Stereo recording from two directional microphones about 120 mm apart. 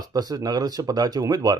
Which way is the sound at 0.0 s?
35° right (ahead or behind).